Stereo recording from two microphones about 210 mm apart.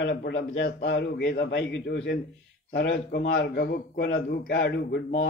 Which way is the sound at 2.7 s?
50° left (ahead or behind).